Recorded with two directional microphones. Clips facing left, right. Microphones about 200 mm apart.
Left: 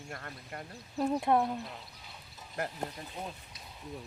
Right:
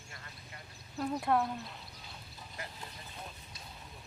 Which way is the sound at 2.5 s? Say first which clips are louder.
Left 11 dB; 55° left (ahead or behind).